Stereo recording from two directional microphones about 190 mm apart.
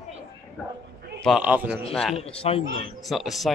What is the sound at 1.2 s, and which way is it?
Speech, 5° right (ahead or behind).